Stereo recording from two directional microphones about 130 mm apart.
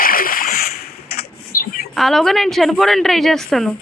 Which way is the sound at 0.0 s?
90° left.